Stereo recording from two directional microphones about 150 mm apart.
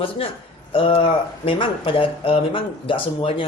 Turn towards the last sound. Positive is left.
turn(degrees=40)  # may be behind; listen again after turning